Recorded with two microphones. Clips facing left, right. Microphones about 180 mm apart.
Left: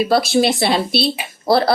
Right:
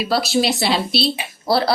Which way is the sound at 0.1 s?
50° left (ahead or behind).